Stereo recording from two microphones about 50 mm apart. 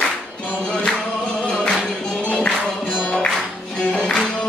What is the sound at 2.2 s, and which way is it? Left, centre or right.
Music, left.